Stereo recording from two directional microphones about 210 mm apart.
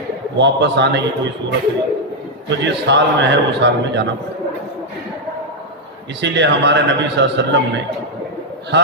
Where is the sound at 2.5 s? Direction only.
55° right (ahead or behind).